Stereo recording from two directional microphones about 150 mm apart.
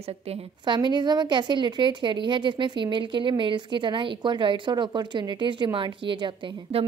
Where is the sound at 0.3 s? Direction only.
30° right (ahead or behind).